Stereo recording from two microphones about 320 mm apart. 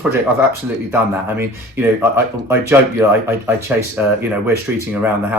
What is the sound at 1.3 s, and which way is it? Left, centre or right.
Speech, centre.